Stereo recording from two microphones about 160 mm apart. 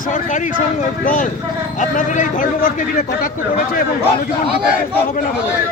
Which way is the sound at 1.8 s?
55° left (ahead or behind).